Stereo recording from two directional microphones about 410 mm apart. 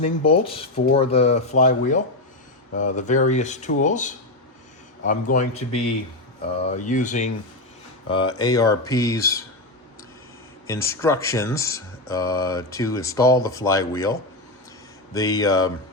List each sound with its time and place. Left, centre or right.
0.0 s speech: centre
10.7 s speech: centre
15.1 s speech: centre